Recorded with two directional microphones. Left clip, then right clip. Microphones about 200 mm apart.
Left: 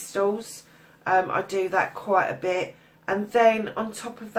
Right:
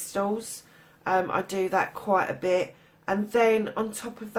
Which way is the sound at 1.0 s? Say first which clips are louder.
Left 3 dB; 50° right (ahead or behind).